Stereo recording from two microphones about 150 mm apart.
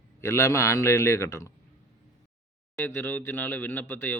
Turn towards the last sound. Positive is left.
turn(degrees=10)  # may be behind; listen again after turning